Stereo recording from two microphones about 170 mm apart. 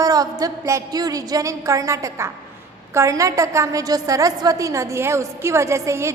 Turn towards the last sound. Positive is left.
turn(degrees=-15)  # may be behind; listen again after turning